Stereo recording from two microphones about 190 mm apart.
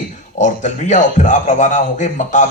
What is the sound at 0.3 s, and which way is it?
A man's voice, 40° left (ahead or behind).